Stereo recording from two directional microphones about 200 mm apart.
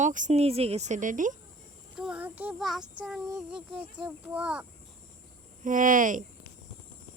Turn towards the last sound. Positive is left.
turn(degrees=-40)  # may be behind; listen again after turning